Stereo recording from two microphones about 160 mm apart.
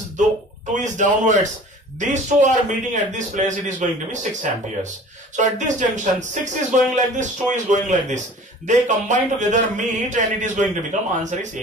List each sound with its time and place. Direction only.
0.7 s speech: 50° right (ahead or behind)